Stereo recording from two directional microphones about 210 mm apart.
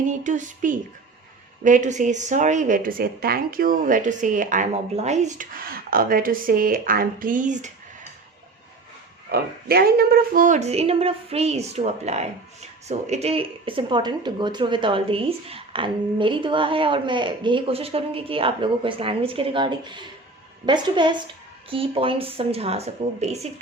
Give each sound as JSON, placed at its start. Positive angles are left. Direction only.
{"t": 0.1, "sound": "a woman's voice", "side_deg": -35}
{"t": 9.3, "sound": "a woman's voice", "side_deg": -45}